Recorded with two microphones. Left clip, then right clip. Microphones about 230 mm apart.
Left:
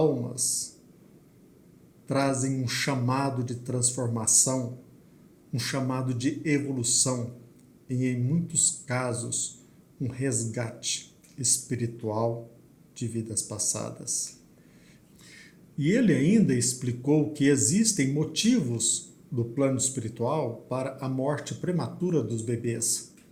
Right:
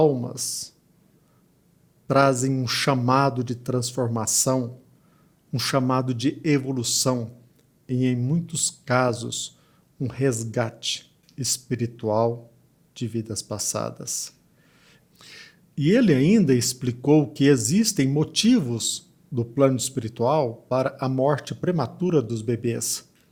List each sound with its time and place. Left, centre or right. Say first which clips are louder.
0.0 s speech: right 5 dB; right
2.0 s speech: right 8 dB; right